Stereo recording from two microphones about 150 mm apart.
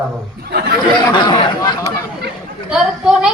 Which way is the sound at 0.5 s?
90° right.